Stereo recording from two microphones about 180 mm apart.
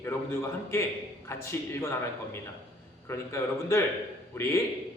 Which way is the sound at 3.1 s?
15° left (ahead or behind).